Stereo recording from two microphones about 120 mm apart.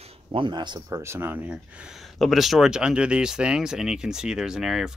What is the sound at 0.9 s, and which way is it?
Speech, 20° right (ahead or behind).